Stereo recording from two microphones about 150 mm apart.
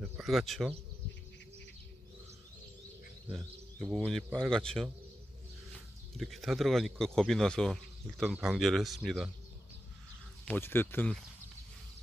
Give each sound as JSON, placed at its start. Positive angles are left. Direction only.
{"t": 0.2, "sound": "a man's voice", "side_deg": 0}
{"t": 3.3, "sound": "a man's voice", "side_deg": 0}
{"t": 6.1, "sound": "a man's voice", "side_deg": 0}
{"t": 10.4, "sound": "speech", "side_deg": 10}